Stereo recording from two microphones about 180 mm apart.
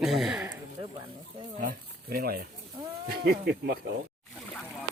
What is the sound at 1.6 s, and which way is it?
Speech, 55° right (ahead or behind).